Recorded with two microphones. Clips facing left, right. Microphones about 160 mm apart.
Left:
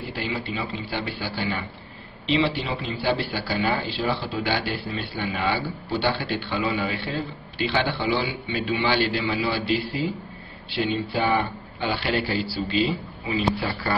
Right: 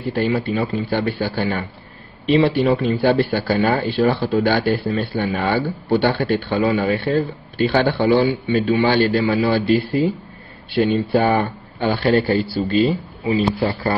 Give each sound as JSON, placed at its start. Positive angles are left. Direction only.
{"t": 0.1, "sound": "speech", "side_deg": -45}
{"t": 10.7, "sound": "speech", "side_deg": -50}